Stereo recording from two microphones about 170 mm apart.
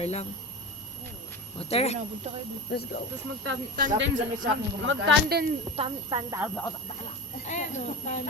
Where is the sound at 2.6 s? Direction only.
65° left (ahead or behind).